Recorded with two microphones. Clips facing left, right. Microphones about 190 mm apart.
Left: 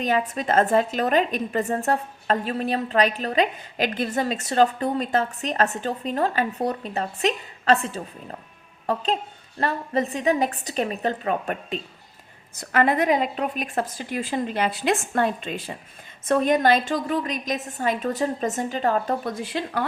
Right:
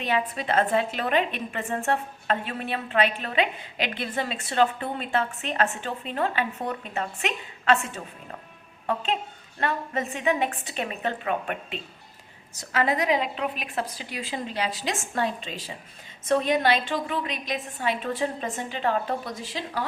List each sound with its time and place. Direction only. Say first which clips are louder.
0.0 s a woman's voice: left 3 dB; 45° left (ahead or behind)
12.5 s a woman's voice: left 4 dB; 55° left (ahead or behind)